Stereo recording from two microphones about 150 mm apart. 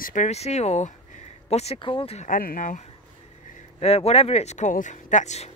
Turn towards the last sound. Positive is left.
turn(degrees=50)  # may be behind; listen again after turning